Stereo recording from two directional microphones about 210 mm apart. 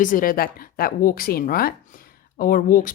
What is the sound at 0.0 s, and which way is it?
A woman's voice, 40° left (ahead or behind).